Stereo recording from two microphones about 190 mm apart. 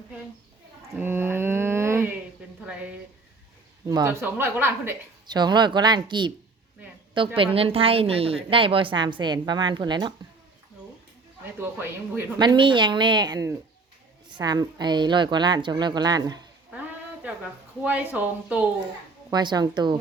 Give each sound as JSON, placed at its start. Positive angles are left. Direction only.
{"t": 0.9, "sound": "a sound", "side_deg": -10}
{"t": 2.6, "sound": "a woman's voice", "side_deg": -5}
{"t": 5.2, "sound": "a woman's voice", "side_deg": -20}
{"t": 7.3, "sound": "a woman's voice", "side_deg": -30}
{"t": 11.6, "sound": "a woman's voice", "side_deg": -10}
{"t": 12.4, "sound": "a woman's voice", "side_deg": -25}
{"t": 17.2, "sound": "a woman's voice", "side_deg": -10}
{"t": 19.3, "sound": "a woman's voice", "side_deg": -20}